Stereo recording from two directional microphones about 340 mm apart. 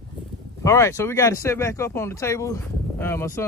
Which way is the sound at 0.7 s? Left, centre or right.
Centre.